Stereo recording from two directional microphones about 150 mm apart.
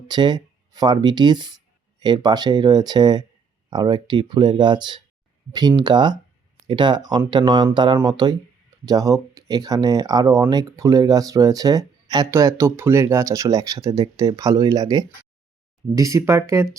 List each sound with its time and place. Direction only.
0.1 s speech: 30° right (ahead or behind)